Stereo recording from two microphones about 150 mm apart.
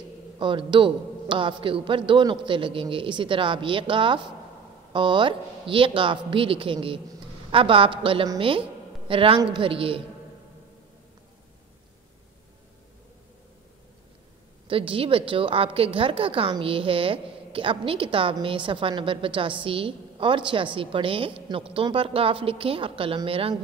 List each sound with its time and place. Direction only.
0.4 s a woman's voice: 35° right (ahead or behind)
14.7 s a woman's voice: 35° right (ahead or behind)